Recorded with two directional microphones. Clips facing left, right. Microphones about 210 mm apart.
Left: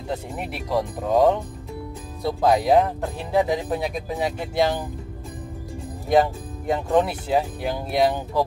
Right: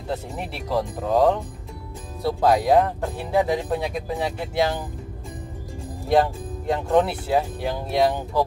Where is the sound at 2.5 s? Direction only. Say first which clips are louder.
Left 1 dB; 20° left (ahead or behind).